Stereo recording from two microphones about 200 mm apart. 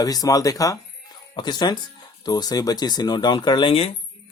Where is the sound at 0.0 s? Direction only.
20° left (ahead or behind).